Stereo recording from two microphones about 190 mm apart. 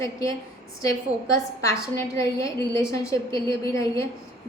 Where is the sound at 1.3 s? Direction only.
15° left (ahead or behind).